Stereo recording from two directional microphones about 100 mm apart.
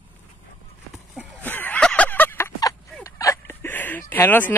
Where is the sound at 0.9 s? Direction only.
5° right (ahead or behind).